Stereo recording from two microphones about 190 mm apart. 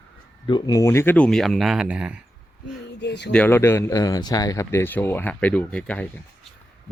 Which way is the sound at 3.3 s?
10° left (ahead or behind).